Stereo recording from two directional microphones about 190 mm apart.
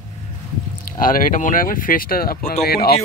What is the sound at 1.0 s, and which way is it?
Speech, 45° left (ahead or behind).